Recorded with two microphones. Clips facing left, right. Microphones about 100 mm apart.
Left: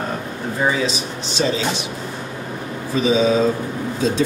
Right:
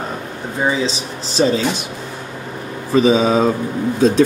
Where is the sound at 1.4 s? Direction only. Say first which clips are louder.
Right 5 dB; 35° right (ahead or behind).